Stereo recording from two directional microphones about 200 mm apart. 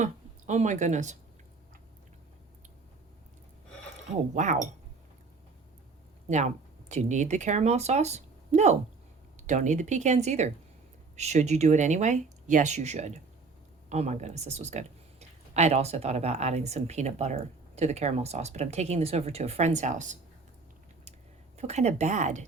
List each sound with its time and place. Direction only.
0.0 s speech: 35° right (ahead or behind)
4.4 s speech: 35° right (ahead or behind)
6.2 s speech: 35° right (ahead or behind)
21.6 s speech: 35° right (ahead or behind)